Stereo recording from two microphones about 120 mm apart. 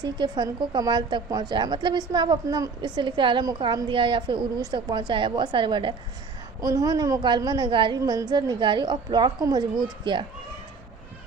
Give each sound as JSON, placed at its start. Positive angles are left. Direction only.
{"t": 0.0, "sound": "a woman's voice", "side_deg": -35}
{"t": 6.6, "sound": "a woman's voice", "side_deg": -30}